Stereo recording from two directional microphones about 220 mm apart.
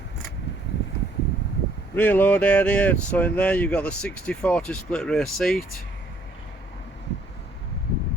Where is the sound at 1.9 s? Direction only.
10° left (ahead or behind).